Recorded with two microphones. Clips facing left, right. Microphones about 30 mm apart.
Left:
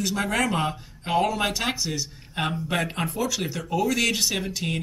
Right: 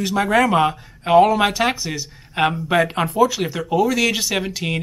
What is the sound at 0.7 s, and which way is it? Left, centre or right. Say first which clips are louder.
Speech: right 10 dB; centre.